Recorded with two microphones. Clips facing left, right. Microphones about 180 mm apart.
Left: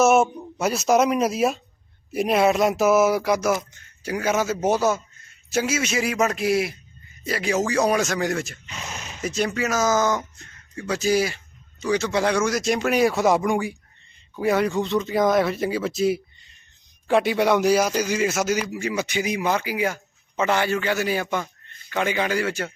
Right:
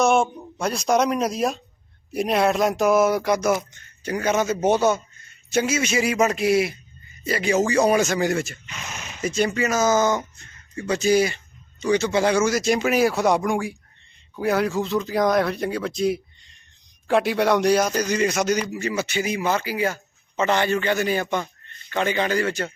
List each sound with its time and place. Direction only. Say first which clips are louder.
0.0 s speech: left 2 dB; 5° left (ahead or behind)
8.6 s speech: left 1 dB; 35° left (ahead or behind)
9.2 s speech: right 2 dB; centre (ahead or behind)